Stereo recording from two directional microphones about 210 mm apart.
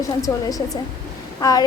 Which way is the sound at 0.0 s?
15° left (ahead or behind).